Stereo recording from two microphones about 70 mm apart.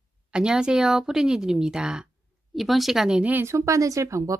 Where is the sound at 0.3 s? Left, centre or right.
Centre.